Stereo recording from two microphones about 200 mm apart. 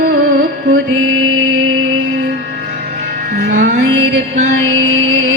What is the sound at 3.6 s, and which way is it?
Music, 65° right (ahead or behind).